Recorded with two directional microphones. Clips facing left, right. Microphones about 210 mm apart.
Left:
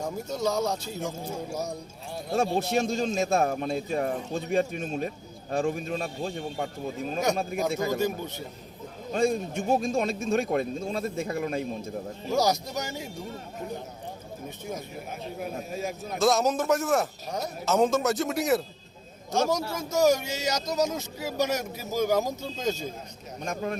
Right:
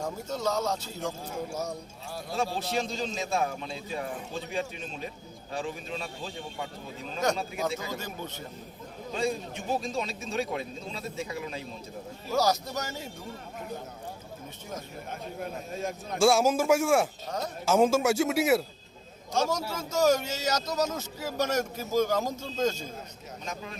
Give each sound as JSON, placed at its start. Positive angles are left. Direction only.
{"t": 0.0, "sound": "speech", "side_deg": 10}
{"t": 2.6, "sound": "a man's voice", "side_deg": 50}
{"t": 9.1, "sound": "a man's voice", "side_deg": 50}
{"t": 12.3, "sound": "speech", "side_deg": 15}
{"t": 15.4, "sound": "speech", "side_deg": 5}
{"t": 16.2, "sound": "speech", "side_deg": -10}
{"t": 19.3, "sound": "speech", "side_deg": 10}
{"t": 23.4, "sound": "a man's voice", "side_deg": 50}